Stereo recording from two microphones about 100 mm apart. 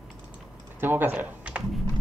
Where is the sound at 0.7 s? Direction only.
20° right (ahead or behind).